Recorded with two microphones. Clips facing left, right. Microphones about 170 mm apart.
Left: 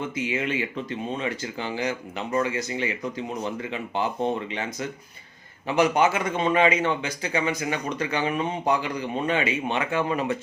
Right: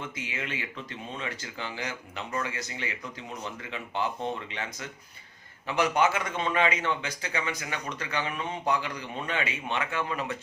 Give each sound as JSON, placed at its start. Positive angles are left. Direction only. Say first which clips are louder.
{"t": 0.3, "sound": "a man's voice", "louder": "left 9 dB", "side_deg": 15}